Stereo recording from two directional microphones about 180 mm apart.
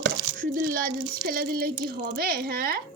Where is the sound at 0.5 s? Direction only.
50° right (ahead or behind).